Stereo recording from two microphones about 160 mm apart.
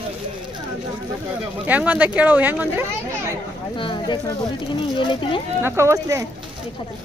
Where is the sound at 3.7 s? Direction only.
30° left (ahead or behind).